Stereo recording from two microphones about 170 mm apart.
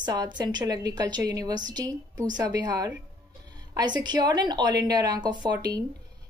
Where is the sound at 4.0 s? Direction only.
25° right (ahead or behind).